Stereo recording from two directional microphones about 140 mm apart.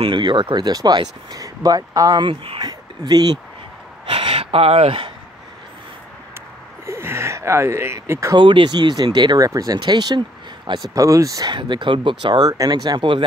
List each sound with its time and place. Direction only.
0.0 s speech: 35° right (ahead or behind)
4.0 s a sound: 40° right (ahead or behind)
6.9 s speech: 20° right (ahead or behind)
8.4 s speech: 35° right (ahead or behind)
11.5 s speech: 35° right (ahead or behind)